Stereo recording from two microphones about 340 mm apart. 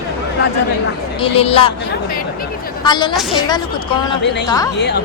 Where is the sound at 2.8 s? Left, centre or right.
Centre.